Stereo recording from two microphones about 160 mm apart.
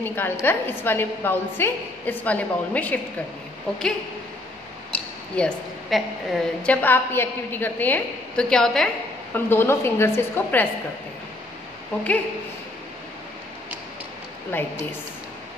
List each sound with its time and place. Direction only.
0.0 s a woman's voice: 15° left (ahead or behind)
5.3 s a woman's voice: 5° left (ahead or behind)